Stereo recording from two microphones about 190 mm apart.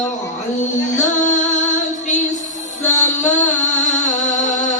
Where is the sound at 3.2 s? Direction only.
40° left (ahead or behind).